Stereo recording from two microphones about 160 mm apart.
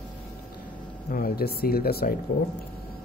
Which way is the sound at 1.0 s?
65° left (ahead or behind).